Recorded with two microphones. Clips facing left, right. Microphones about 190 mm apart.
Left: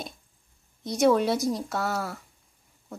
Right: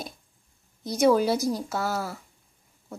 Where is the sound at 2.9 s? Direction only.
Centre (ahead or behind).